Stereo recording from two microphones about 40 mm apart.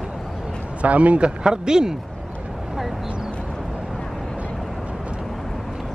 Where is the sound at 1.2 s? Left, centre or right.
Centre.